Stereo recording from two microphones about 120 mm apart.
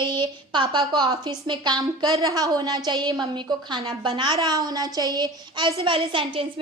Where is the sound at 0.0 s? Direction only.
40° right (ahead or behind).